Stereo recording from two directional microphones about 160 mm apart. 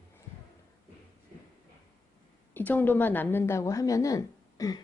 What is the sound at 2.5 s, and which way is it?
Speech, 10° left (ahead or behind).